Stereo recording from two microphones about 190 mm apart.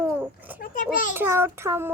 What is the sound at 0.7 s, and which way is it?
Child singing, 45° left (ahead or behind).